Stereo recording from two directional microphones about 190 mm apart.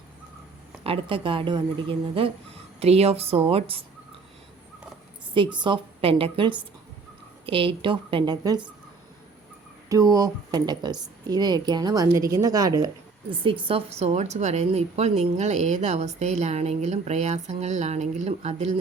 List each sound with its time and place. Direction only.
0.9 s a woman's voice: 25° right (ahead or behind)
5.3 s a woman's voice: 25° right (ahead or behind)
9.9 s a woman's voice: 20° right (ahead or behind); by 18.7 s 35° right (ahead or behind)